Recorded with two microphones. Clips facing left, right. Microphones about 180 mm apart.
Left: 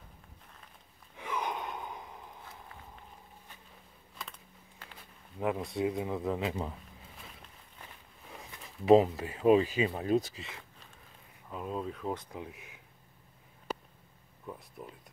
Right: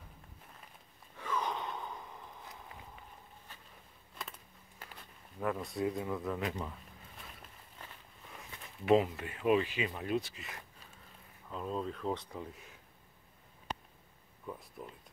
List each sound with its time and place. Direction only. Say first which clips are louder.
1.1 s gasp: left 1 dB; 15° left (ahead or behind)
4.2 s a sound: even; 5° right (ahead or behind)
5.6 s speech: left 3 dB; 25° left (ahead or behind)
8.3 s speech: left 2 dB; 35° left (ahead or behind)
11.5 s speech: left 1 dB; 5° left (ahead or behind)
14.4 s a sound: even; 5° left (ahead or behind)